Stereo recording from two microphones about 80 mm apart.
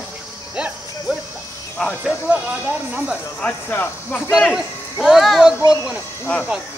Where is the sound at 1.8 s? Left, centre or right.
Centre.